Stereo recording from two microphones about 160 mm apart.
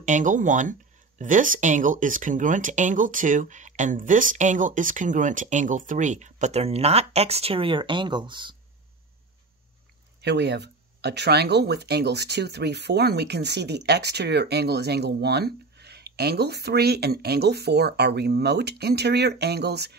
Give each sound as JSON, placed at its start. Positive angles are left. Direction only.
{"t": 0.0, "sound": "speech", "side_deg": -50}
{"t": 10.2, "sound": "speech", "side_deg": -90}